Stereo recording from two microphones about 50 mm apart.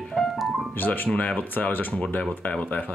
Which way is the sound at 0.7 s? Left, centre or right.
Left.